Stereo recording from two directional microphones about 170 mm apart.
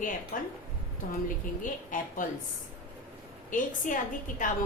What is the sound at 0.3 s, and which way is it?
Speech, 55° left (ahead or behind).